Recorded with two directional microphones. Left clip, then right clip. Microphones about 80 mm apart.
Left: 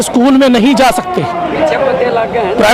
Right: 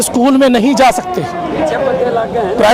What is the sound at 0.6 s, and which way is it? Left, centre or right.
Speech, left.